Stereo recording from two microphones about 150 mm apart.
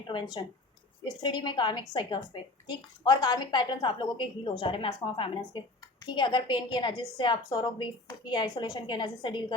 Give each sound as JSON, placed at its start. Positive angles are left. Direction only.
{"t": 0.1, "sound": "a woman's voice", "side_deg": 30}